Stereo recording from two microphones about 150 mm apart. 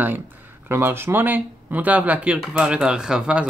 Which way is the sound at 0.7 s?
15° right (ahead or behind).